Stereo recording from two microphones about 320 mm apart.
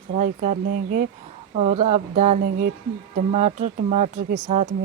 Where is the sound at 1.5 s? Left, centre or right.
Right.